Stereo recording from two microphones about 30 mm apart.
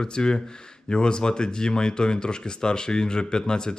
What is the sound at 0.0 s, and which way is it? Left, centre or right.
Speech, left.